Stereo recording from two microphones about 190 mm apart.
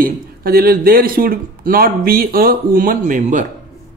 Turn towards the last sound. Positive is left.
turn(degrees=-45)  # may be behind; listen again after turning